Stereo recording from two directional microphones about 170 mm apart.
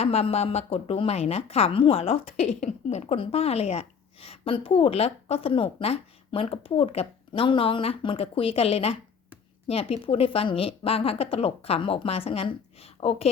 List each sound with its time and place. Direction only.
0.0 s speech: 35° left (ahead or behind)